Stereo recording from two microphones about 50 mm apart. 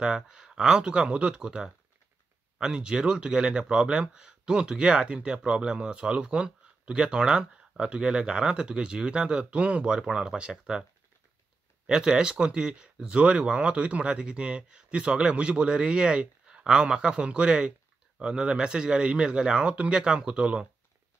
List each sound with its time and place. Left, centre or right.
0.0 s speech: centre